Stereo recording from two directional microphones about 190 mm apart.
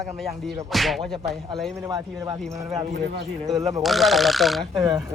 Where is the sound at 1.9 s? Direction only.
20° right (ahead or behind).